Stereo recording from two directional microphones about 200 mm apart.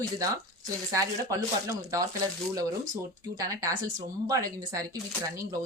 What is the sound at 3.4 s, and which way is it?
Speech, 15° right (ahead or behind).